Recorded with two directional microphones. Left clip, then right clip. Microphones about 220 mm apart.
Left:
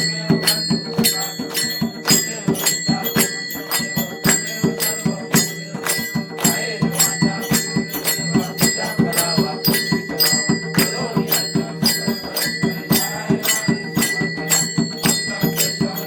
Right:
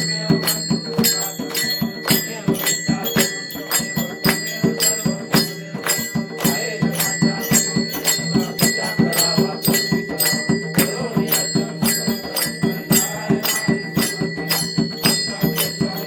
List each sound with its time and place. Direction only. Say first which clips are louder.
0.0 s music: left 1 dB; centre (ahead or behind)
6.4 s music: left 1 dB; centre (ahead or behind)